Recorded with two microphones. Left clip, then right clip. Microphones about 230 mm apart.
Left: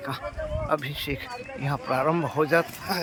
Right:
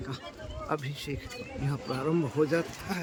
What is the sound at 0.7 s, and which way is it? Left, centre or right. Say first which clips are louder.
Speech: left 5 dB; centre.